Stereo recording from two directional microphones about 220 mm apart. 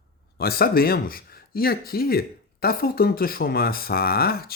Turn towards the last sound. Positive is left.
turn(degrees=45)  # may be behind; listen again after turning